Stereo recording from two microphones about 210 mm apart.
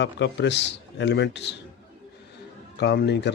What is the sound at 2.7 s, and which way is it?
Speech, 55° left (ahead or behind).